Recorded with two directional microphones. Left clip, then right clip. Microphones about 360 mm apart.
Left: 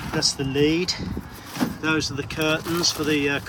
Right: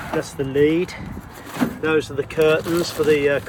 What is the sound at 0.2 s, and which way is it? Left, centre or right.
Speech, centre.